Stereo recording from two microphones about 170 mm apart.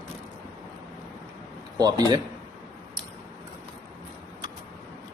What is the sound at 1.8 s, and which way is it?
Speech, 20° right (ahead or behind).